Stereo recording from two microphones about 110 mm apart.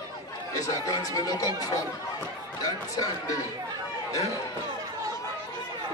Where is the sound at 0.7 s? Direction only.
35° left (ahead or behind).